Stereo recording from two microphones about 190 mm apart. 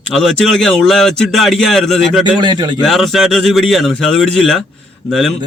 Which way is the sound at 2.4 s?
25° right (ahead or behind).